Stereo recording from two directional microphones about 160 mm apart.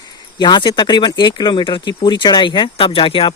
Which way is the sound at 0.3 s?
30° left (ahead or behind).